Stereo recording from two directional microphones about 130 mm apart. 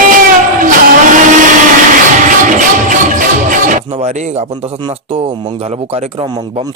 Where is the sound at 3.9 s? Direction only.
60° right (ahead or behind).